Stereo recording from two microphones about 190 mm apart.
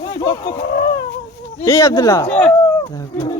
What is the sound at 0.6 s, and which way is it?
Speech, 60° left (ahead or behind).